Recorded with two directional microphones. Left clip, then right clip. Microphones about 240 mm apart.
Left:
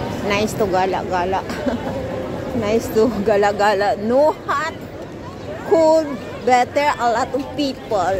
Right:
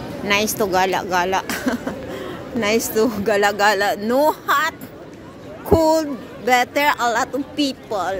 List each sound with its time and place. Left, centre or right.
0.3 s a woman's voice: centre